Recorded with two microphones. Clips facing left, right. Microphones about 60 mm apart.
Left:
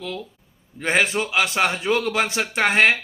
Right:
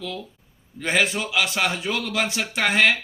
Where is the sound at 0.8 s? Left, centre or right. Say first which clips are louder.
Left 2 dB; left.